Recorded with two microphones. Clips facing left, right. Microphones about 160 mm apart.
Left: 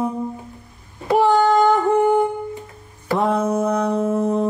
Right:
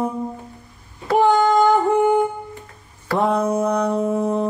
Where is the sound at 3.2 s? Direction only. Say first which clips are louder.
Right 1 dB; centre (ahead or behind).